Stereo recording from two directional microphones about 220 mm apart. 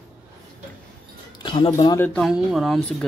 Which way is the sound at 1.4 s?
20° left (ahead or behind).